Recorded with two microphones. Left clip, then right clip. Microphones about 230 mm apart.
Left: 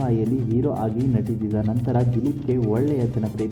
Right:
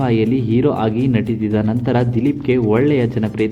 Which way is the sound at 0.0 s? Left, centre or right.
Right.